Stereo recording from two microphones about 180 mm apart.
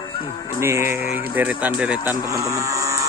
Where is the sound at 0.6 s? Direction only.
15° right (ahead or behind).